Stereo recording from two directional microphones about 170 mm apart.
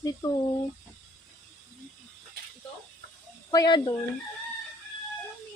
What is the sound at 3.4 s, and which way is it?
Speech, 25° left (ahead or behind).